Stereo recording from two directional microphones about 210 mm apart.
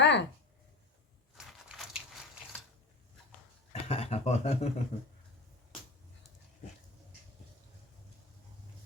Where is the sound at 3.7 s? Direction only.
30° left (ahead or behind).